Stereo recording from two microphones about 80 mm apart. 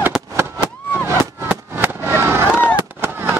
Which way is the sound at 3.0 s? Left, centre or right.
Right.